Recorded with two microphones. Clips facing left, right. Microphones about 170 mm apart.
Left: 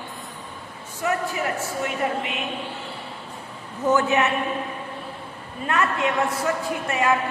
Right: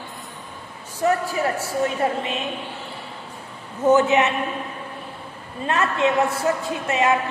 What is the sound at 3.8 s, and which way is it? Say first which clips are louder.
Speech: right 4 dB; 20° right (ahead or behind).